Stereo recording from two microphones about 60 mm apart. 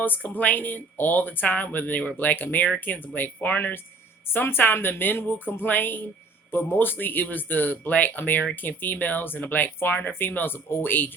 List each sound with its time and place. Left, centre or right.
0.0 s speech: left